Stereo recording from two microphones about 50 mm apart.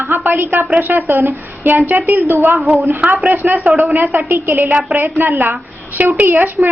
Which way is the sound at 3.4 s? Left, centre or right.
Right.